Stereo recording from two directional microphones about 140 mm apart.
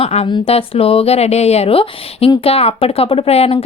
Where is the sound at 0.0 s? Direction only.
45° left (ahead or behind).